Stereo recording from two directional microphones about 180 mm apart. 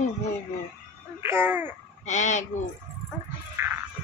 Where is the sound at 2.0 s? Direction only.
40° left (ahead or behind).